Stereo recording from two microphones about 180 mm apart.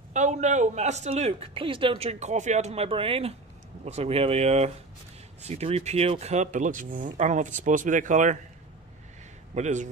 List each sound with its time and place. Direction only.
0.1 s speech: 40° right (ahead or behind)
9.6 s speech: 40° right (ahead or behind)